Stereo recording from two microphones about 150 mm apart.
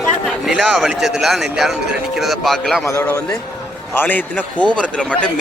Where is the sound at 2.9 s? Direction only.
15° left (ahead or behind).